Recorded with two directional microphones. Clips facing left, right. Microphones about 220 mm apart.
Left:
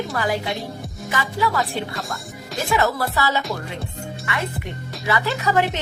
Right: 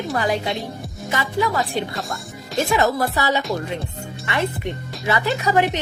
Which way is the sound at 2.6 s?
20° right (ahead or behind).